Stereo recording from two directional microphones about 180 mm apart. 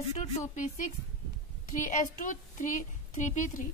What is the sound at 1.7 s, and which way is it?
A woman's voice, 45° left (ahead or behind).